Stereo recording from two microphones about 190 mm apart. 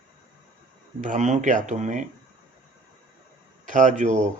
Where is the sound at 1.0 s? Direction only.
40° right (ahead or behind).